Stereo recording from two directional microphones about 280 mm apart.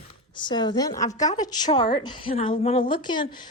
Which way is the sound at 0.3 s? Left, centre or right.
Centre.